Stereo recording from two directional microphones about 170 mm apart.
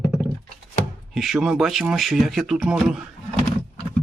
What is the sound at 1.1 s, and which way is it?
Speech, centre (ahead or behind).